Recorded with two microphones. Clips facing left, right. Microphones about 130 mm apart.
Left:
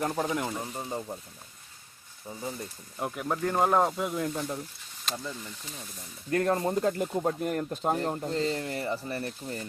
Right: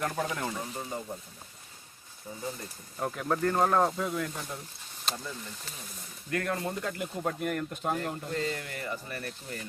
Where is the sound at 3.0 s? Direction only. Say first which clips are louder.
Right 1 dB; 10° left (ahead or behind).